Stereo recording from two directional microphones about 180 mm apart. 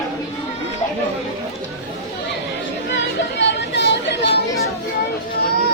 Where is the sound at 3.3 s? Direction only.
75° left (ahead or behind).